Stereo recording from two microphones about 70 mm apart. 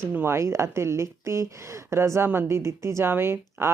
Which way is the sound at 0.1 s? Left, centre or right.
Right.